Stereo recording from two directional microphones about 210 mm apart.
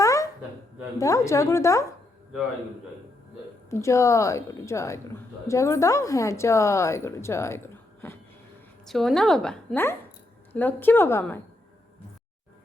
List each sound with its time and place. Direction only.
0.0 s a sound: 15° left (ahead or behind)
0.9 s a woman's voice: 15° left (ahead or behind)
3.7 s a woman's voice: 15° left (ahead or behind)